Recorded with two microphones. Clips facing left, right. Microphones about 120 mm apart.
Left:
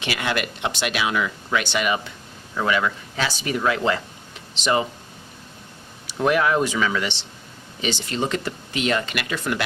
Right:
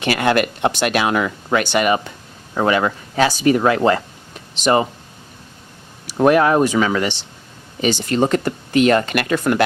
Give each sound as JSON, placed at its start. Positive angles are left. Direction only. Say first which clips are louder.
{"t": 0.0, "sound": "speech", "louder": "right 9 dB", "side_deg": -50}
{"t": 6.1, "sound": "speech", "louder": "right 6 dB", "side_deg": -50}